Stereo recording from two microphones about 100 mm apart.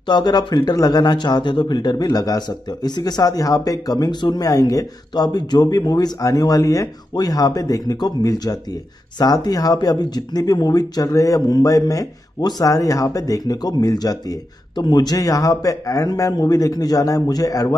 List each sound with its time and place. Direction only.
0.1 s a man's voice: 45° left (ahead or behind)